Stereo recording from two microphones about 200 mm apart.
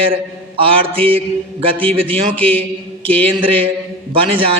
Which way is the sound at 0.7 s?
25° right (ahead or behind).